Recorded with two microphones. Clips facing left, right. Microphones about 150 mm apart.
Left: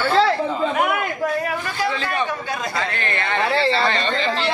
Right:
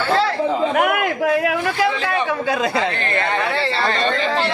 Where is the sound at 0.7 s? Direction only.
75° right (ahead or behind).